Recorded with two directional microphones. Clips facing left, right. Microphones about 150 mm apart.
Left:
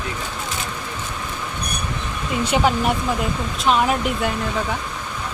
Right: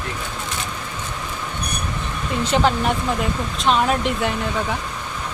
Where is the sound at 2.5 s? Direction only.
10° left (ahead or behind).